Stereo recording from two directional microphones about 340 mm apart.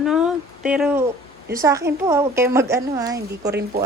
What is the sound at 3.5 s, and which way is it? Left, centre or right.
Speech, right.